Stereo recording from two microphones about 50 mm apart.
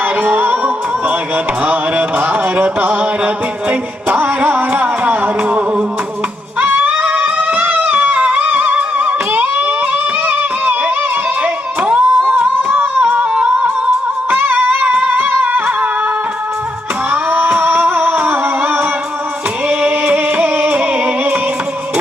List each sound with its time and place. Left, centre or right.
0.2 s music: right
1.6 s a sound: right
3.7 s music: right
6.9 s music: centre
7.3 s music: right
11.4 s a sound: right
12.3 s singing: centre
12.7 s music: right
17.1 s music: right
19.6 s music: right
20.1 s music: right